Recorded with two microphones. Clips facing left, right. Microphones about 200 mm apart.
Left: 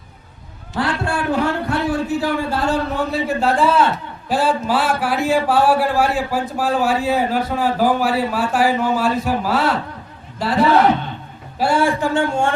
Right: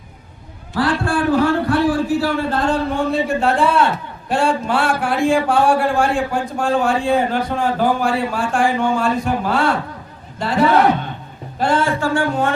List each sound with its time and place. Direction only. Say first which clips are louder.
0.7 s a man's voice: right 3 dB; 20° left (ahead or behind); by 10.7 s centre (ahead or behind)
11.6 s speech: left 1 dB; 10° left (ahead or behind); by 12.5 s 25° left (ahead or behind)